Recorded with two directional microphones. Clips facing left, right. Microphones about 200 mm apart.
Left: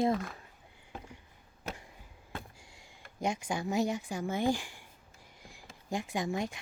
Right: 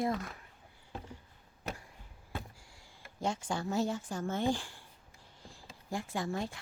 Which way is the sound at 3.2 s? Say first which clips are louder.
Left 1 dB; 15° left (ahead or behind).